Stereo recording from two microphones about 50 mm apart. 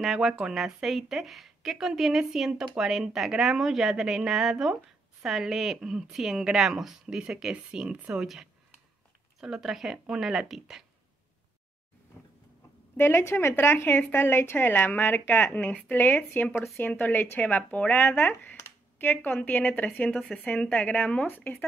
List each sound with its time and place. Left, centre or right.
0.0 s a woman's voice: centre
12.9 s a woman's voice: left
15.5 s speech: left
16.2 s speech: left
16.7 s a woman's voice: left
20.1 s speech: centre
20.3 s speech: left
21.3 s speech: left